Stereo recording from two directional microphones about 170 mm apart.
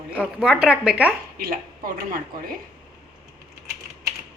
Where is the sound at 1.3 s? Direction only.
60° right (ahead or behind).